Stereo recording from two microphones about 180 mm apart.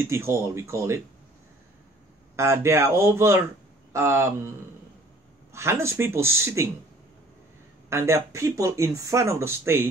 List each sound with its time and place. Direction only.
0.0 s speech: 15° right (ahead or behind)
2.3 s speech: 15° right (ahead or behind)
5.5 s speech: 15° right (ahead or behind)
7.9 s speech: 15° right (ahead or behind)